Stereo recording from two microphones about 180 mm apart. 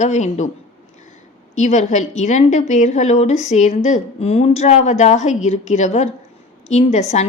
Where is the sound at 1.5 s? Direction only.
40° left (ahead or behind).